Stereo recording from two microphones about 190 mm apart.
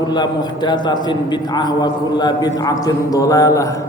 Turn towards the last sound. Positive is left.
turn(degrees=15)  # may be behind; listen again after turning